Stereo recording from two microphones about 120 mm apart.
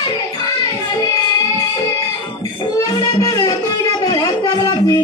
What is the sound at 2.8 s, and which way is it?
Music, 30° left (ahead or behind).